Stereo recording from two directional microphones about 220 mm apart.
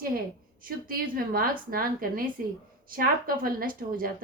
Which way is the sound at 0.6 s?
40° right (ahead or behind).